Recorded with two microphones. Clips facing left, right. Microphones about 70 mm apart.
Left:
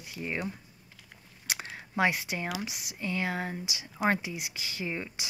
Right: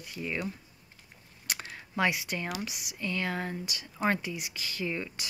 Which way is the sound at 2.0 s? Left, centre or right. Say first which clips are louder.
Left 1 dB; left.